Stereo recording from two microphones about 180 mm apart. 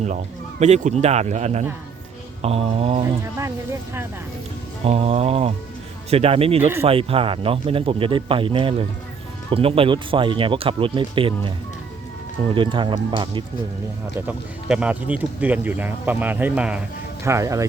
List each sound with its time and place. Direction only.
0.6 s speech: 40° right (ahead or behind)
3.0 s speech: 15° right (ahead or behind)
4.9 s speech: 35° right (ahead or behind)
6.6 s speech: 15° right (ahead or behind)
6.8 s speech: 30° right (ahead or behind)
14.2 s speech: 5° right (ahead or behind)
17.2 s speech: 15° right (ahead or behind)